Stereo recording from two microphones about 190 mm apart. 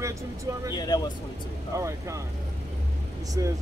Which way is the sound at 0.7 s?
20° left (ahead or behind).